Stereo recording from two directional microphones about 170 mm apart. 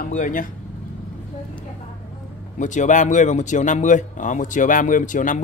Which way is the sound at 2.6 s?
45° left (ahead or behind).